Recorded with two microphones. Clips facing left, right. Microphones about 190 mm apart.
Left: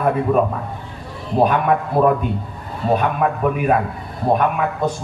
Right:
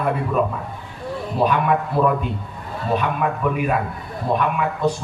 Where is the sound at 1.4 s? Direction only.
45° left (ahead or behind).